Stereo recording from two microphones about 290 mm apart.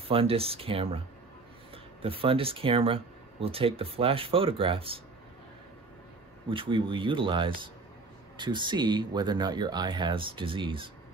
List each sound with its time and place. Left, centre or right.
0.1 s speech: centre
6.5 s speech: centre